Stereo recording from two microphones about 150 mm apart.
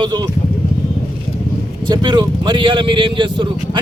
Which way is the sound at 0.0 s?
30° right (ahead or behind).